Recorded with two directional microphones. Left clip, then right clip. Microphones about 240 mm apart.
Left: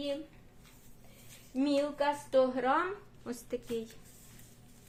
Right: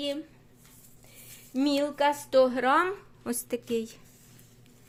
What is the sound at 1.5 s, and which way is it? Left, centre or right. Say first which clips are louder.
A woman's voice: right 4 dB; right.